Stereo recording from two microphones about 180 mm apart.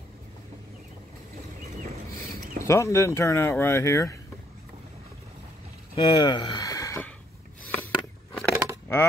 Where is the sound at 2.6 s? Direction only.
15° left (ahead or behind).